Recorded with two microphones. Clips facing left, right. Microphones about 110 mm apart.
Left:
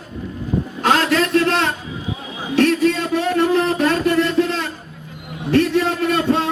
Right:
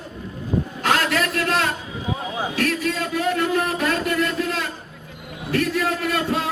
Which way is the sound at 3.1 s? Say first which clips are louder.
Left 2 dB; 25° left (ahead or behind).